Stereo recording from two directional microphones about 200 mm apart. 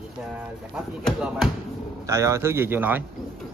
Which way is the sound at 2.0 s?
15° right (ahead or behind).